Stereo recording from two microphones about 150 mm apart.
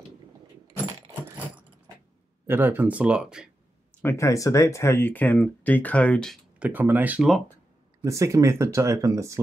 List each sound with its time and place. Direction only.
2.4 s speech: 15° right (ahead or behind)
4.0 s speech: 20° left (ahead or behind)
6.6 s speech: 10° right (ahead or behind)
8.0 s speech: 20° right (ahead or behind)